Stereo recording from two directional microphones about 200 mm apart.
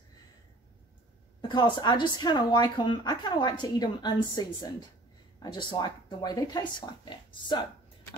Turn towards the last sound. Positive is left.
turn(degrees=20)  # may be behind; listen again after turning